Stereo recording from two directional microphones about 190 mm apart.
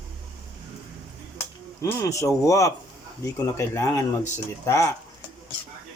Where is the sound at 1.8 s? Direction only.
15° left (ahead or behind).